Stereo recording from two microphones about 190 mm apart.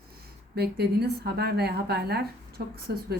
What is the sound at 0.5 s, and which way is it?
A woman's voice, 60° right (ahead or behind).